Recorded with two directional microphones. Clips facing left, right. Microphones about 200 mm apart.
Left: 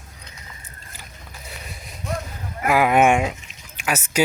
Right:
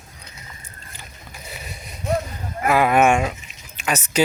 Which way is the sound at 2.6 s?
15° left (ahead or behind).